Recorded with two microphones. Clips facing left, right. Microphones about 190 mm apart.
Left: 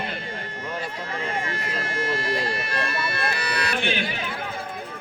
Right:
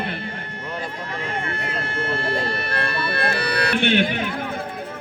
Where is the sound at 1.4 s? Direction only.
60° right (ahead or behind).